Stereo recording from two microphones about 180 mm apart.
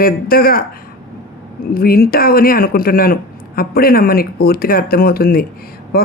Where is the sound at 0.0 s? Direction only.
55° left (ahead or behind).